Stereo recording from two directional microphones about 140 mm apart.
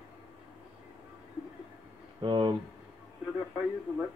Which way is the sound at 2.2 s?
35° right (ahead or behind).